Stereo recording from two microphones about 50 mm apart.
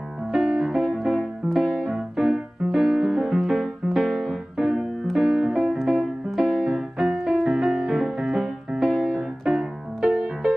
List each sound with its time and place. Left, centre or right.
0.3 s music: centre
0.7 s music: centre